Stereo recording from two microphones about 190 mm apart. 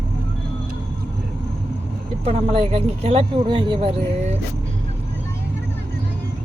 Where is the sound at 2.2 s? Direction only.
30° right (ahead or behind).